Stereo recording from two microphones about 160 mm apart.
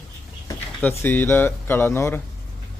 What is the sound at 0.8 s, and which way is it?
Speech, 10° left (ahead or behind).